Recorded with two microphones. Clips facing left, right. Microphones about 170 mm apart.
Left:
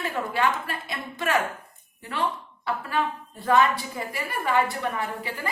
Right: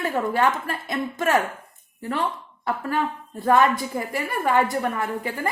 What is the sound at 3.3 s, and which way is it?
A woman's voice, 45° right (ahead or behind).